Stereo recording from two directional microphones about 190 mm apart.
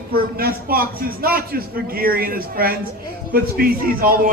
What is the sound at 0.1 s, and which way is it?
A man's voice, 50° right (ahead or behind).